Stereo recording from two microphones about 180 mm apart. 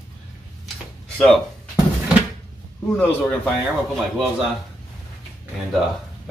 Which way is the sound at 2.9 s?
5° left (ahead or behind).